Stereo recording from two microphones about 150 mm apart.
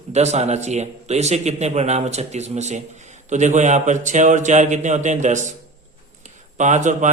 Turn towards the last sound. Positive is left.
turn(degrees=-55)  # may be behind; listen again after turning